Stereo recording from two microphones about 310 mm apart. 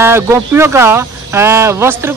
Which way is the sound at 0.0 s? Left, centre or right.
Centre.